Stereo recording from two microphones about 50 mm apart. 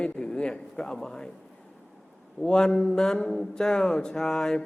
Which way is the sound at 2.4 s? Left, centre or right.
Centre.